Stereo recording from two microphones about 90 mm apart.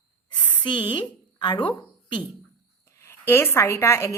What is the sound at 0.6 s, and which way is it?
A woman's voice, 65° left (ahead or behind).